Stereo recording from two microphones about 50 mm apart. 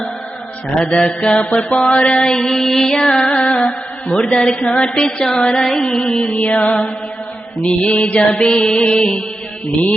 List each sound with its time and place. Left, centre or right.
1.0 s music: centre
1.7 s mantra: centre
6.3 s music: left